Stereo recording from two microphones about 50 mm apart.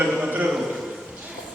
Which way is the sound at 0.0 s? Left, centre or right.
Right.